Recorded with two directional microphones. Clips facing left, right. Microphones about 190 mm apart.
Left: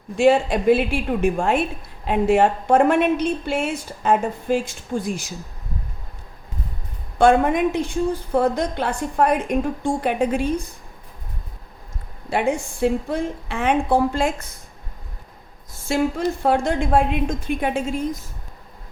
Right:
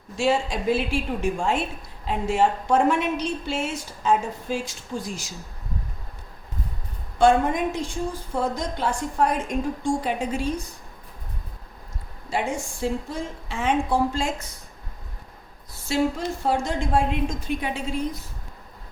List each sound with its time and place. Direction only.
0.2 s a woman's voice: 60° left (ahead or behind)
7.2 s a woman's voice: 60° left (ahead or behind)
12.3 s a woman's voice: 60° left (ahead or behind)
15.9 s a sound: 55° left (ahead or behind)
16.4 s a woman's voice: 60° left (ahead or behind)